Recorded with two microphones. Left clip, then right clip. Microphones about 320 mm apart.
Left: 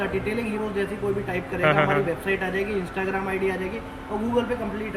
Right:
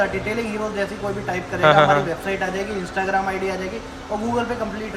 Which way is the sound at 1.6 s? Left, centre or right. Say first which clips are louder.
Right 7 dB; centre.